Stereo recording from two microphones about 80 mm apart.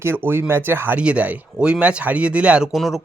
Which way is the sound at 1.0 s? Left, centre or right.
Centre.